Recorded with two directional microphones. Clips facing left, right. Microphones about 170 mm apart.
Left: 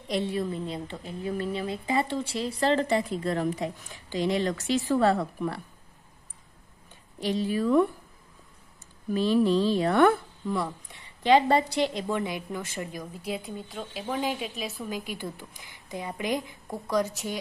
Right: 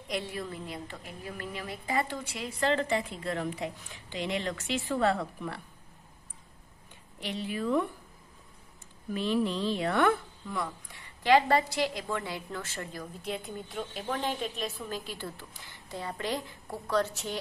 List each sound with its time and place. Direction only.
0.1 s a woman's voice: 25° left (ahead or behind)
7.2 s a woman's voice: 35° left (ahead or behind)
9.1 s a woman's voice: 35° left (ahead or behind); by 17.4 s 10° left (ahead or behind)